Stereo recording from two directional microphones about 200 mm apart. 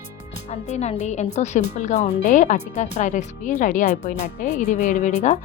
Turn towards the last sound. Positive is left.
turn(degrees=35)  # may be behind; listen again after turning